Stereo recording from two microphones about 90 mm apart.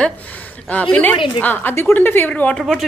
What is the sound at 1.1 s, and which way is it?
Speech, 70° left (ahead or behind).